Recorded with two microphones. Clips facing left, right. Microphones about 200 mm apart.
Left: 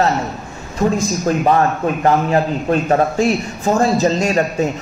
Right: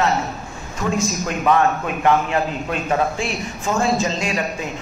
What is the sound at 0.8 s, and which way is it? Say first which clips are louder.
A man's voice: left 5 dB; 35° left (ahead or behind).